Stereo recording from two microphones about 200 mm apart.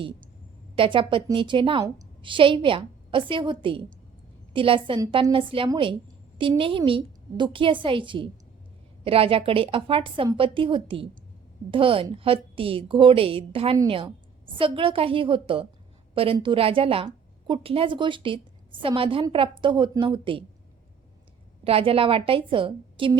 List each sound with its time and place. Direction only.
0.8 s a woman's voice: 25° right (ahead or behind)
21.6 s a woman's voice: 30° right (ahead or behind)